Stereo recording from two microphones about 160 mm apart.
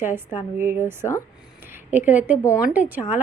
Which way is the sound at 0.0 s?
15° right (ahead or behind).